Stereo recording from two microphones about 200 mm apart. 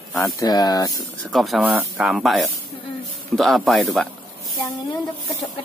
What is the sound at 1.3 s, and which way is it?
Speech, centre (ahead or behind).